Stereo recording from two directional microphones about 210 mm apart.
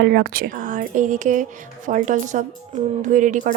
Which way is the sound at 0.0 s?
50° right (ahead or behind).